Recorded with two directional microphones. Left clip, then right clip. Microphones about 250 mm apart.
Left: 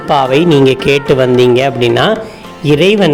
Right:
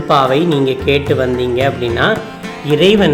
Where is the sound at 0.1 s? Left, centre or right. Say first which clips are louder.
Left 3 dB; left.